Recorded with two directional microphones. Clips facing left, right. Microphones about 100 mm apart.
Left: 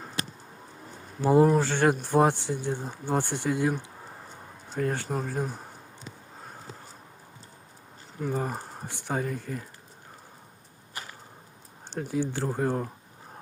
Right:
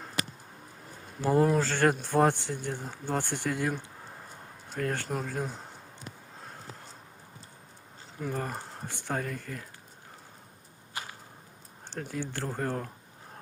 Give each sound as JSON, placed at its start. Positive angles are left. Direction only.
{"t": 1.2, "sound": "speech", "side_deg": 15}
{"t": 6.4, "sound": "a sound", "side_deg": 5}
{"t": 8.2, "sound": "speech", "side_deg": 10}
{"t": 11.9, "sound": "speech", "side_deg": 10}